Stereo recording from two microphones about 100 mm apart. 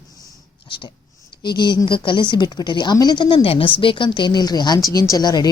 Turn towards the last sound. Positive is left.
turn(degrees=40)  # may be behind; listen again after turning